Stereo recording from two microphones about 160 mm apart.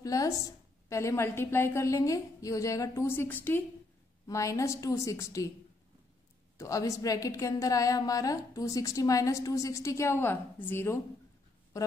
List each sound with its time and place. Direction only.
0.0 s a woman's voice: 20° left (ahead or behind)
6.6 s a woman's voice: 20° left (ahead or behind)